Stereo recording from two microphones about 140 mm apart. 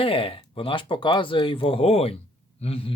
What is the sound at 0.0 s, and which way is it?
Speech, 40° left (ahead or behind).